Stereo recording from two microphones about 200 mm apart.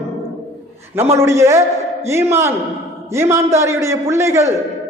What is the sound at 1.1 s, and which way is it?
A man's voice, 15° right (ahead or behind).